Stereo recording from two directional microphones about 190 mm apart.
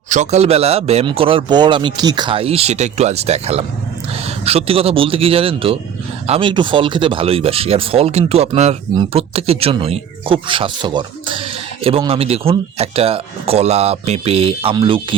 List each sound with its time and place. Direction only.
0.1 s speech: 35° right (ahead or behind)